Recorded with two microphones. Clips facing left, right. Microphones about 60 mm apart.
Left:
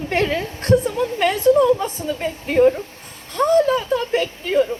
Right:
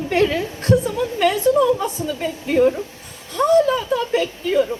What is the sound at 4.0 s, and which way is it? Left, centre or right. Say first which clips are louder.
Speech: right 1 dB; left.